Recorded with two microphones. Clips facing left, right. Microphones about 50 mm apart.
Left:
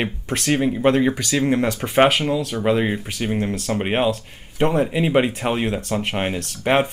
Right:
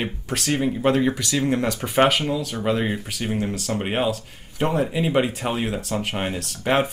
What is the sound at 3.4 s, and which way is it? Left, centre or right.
Speech, left.